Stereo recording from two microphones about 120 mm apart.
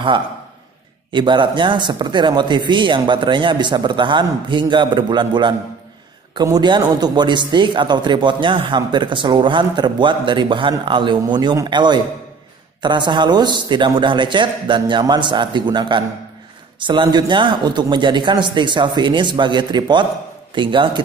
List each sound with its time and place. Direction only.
1.1 s a man's voice: 40° right (ahead or behind)